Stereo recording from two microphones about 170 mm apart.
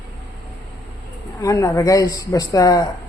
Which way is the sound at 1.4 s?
20° left (ahead or behind).